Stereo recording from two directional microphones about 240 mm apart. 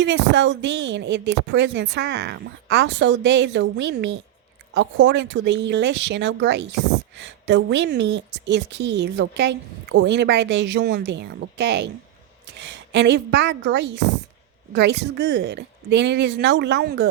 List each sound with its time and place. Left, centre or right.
0.0 s a woman's voice: right